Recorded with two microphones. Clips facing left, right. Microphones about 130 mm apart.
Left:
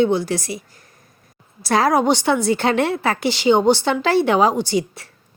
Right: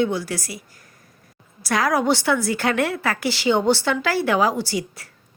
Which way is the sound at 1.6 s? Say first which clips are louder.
Left 4 dB; 25° left (ahead or behind).